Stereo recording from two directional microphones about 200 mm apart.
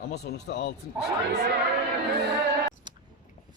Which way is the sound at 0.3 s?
55° left (ahead or behind).